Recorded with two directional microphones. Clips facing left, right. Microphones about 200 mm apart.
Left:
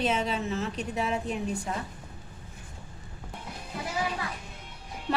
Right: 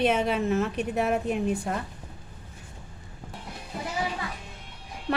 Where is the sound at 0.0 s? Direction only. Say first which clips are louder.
Right 4 dB; 60° right (ahead or behind).